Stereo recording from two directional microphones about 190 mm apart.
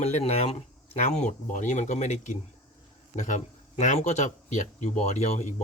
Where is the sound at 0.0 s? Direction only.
35° left (ahead or behind).